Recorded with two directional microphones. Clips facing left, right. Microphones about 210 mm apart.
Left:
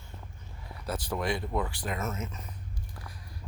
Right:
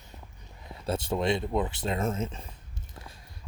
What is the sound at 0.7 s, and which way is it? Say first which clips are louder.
Speech: right 4 dB; 25° right (ahead or behind).